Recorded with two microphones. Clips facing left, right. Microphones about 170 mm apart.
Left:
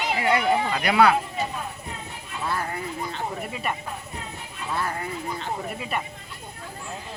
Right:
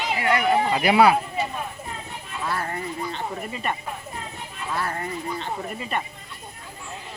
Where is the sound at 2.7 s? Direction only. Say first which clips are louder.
Right 1 dB; 5° left (ahead or behind).